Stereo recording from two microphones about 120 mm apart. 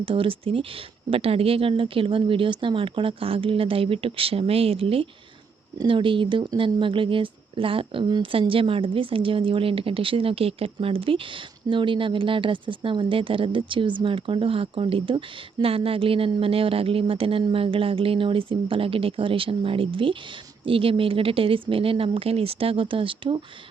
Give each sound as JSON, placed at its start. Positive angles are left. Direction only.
{"t": 0.0, "sound": "speech", "side_deg": -45}